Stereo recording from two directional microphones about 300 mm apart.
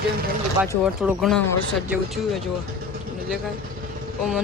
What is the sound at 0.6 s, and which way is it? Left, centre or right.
Speech, centre.